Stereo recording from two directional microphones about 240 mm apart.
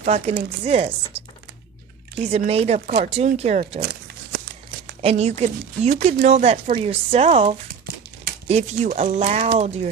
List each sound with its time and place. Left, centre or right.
0.0 s speech: right
2.3 s speech: right
3.8 s a sound: right
5.0 s speech: right